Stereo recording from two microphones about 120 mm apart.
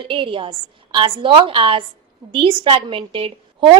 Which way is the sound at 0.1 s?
45° right (ahead or behind).